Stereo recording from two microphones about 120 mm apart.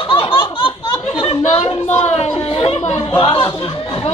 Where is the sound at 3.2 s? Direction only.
40° left (ahead or behind).